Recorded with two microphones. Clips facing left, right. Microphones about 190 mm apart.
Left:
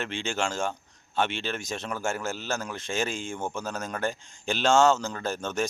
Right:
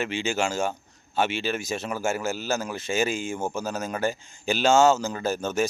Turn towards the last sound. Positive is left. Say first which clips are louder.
# right 4 dB
turn(degrees=-5)  # may be behind; listen again after turning